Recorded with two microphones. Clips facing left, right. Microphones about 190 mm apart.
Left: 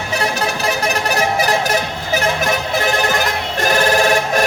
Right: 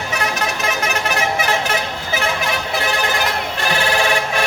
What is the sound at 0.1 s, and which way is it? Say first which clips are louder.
Music: left 4 dB; 30° left (ahead or behind).